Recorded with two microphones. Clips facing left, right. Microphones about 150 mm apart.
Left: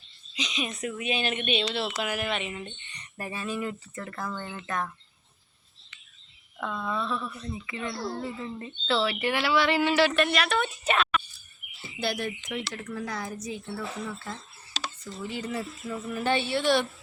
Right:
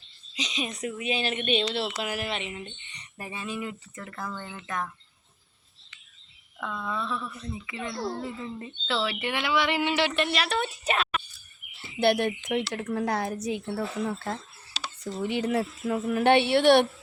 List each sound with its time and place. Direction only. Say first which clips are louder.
0.3 s speech: even; 35° right (ahead or behind)
3.2 s speech: left 2 dB; 15° right (ahead or behind)
6.6 s speech: left 1 dB; 15° left (ahead or behind)
7.7 s speech: right 1 dB; 20° right (ahead or behind); by 11.2 s 35° right (ahead or behind)
11.9 s speech: right 7 dB; 65° right (ahead or behind)